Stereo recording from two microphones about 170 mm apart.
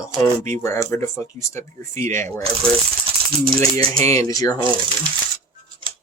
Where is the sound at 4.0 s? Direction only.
20° left (ahead or behind).